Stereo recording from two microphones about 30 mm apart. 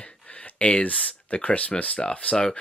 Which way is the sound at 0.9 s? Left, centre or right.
Left.